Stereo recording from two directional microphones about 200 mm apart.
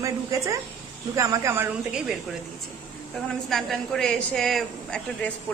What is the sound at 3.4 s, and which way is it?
A woman's voice, centre (ahead or behind).